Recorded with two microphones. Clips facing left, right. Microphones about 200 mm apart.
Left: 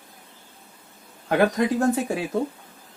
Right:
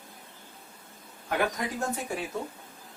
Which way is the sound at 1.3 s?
90° left.